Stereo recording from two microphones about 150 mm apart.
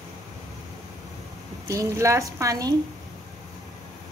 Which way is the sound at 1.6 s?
20° right (ahead or behind).